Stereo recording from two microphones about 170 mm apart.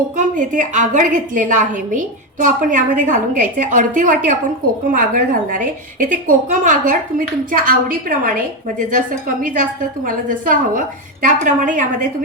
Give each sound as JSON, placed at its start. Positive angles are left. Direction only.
{"t": 0.2, "sound": "a woman's voice", "side_deg": -45}